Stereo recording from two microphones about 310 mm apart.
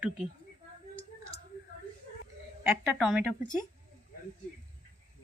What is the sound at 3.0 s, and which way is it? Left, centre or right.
Speech, centre.